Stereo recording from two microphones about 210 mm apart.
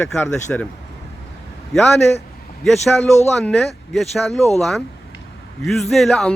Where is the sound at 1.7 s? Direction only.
Centre (ahead or behind).